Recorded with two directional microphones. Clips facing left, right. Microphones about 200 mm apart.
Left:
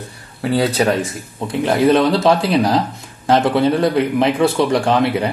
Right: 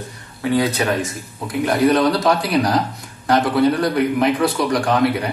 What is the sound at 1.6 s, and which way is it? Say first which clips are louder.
A man's voice: left 2 dB; 25° left (ahead or behind).